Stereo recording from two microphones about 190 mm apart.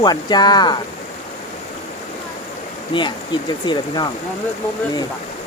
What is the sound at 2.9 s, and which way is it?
Speech, 25° left (ahead or behind).